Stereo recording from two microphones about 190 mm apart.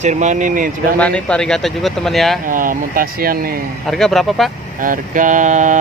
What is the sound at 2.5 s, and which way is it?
Speech, 45° right (ahead or behind).